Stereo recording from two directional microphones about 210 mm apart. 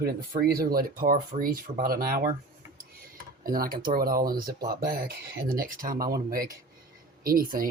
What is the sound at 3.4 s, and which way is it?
Speech, 45° right (ahead or behind).